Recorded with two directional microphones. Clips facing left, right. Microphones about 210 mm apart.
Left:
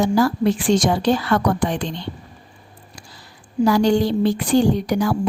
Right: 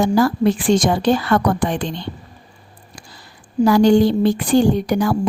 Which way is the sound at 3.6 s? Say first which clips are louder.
Right 4 dB; 55° right (ahead or behind).